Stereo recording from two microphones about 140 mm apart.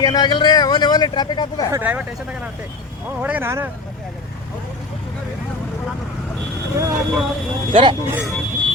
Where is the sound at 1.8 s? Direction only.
10° right (ahead or behind).